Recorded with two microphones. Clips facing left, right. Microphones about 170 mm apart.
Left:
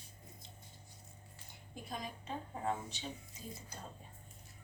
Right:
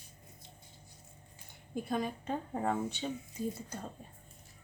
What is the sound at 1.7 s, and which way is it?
Speech, 55° right (ahead or behind).